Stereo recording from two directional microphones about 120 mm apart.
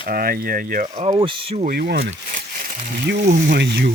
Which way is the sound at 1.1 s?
45° right (ahead or behind).